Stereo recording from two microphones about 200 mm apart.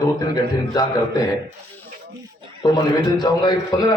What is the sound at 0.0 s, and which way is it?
A man's voice, 20° left (ahead or behind).